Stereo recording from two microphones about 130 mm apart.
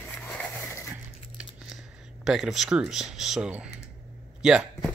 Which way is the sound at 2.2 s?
5° right (ahead or behind).